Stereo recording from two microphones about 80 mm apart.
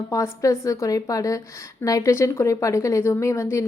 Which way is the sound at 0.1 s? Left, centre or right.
Left.